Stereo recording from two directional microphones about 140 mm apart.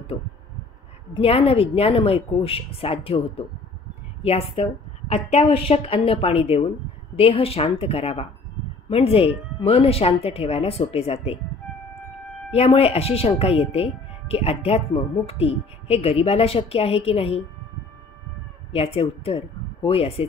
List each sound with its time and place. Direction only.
0.1 s speech: 35° left (ahead or behind)
12.5 s speech: 45° left (ahead or behind)
18.7 s speech: 45° left (ahead or behind)